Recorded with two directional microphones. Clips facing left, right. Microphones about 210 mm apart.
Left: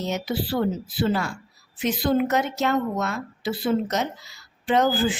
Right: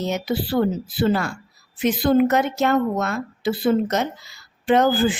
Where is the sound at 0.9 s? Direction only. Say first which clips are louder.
Right 4 dB; 55° right (ahead or behind).